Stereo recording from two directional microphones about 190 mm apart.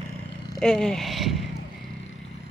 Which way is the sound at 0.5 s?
5° left (ahead or behind).